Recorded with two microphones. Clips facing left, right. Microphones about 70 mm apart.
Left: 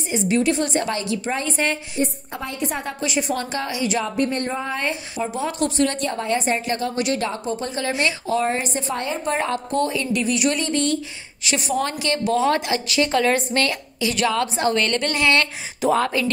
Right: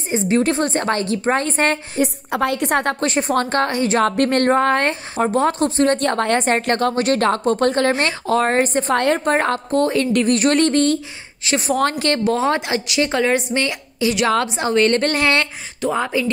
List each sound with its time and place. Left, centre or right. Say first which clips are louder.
0.1 s a woman's voice: right 3 dB; right
2.0 s a woman's voice: right 6 dB; right
3.1 s a woman's voice: right 5 dB; right
4.0 s a woman's voice: right 7 dB; right
5.2 s a woman's voice: right 7 dB; right
5.9 s a woman's voice: right 5 dB; right
7.0 s speech: right 5 dB; right
7.2 s speech: right 9 dB; right
8.9 s a woman's voice: right 10 dB; right
9.2 s speech: right 5 dB; right
11.4 s a woman's voice: right 4 dB; right
11.7 s speech: right 5 dB; right
12.3 s a woman's voice: left 2 dB; right
15.9 s speech: left 1 dB; centre